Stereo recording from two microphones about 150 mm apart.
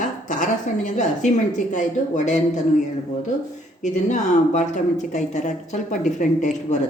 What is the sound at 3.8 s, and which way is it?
Speech, 55° left (ahead or behind).